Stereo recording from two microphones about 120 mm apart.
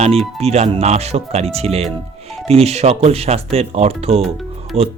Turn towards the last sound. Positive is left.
turn(degrees=-55)  # may be behind; listen again after turning